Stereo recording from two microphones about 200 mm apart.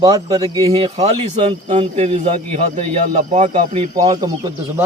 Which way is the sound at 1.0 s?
30° right (ahead or behind).